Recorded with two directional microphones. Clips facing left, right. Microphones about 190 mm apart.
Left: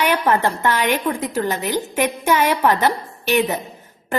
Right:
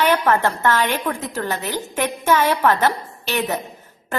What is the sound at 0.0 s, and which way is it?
A woman's voice, 15° left (ahead or behind).